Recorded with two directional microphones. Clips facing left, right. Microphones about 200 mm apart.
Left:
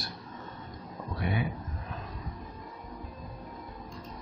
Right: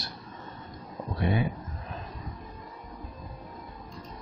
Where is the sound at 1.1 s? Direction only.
30° right (ahead or behind).